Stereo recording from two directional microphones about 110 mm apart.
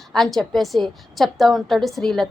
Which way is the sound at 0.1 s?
5° left (ahead or behind).